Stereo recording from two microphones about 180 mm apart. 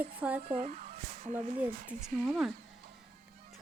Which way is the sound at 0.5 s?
50° right (ahead or behind).